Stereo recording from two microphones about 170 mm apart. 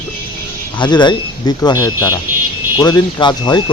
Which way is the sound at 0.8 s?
25° left (ahead or behind).